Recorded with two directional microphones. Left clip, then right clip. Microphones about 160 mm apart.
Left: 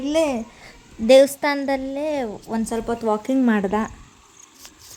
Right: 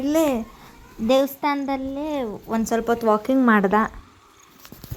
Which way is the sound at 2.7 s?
10° right (ahead or behind).